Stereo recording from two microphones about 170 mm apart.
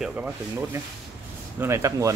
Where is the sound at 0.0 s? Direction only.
10° right (ahead or behind).